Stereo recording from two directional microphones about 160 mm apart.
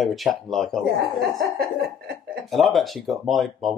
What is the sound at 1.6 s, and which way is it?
Cough, 80° right.